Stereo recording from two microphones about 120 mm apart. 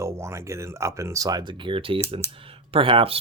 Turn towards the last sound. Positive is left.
turn(degrees=-50)  # may be behind; listen again after turning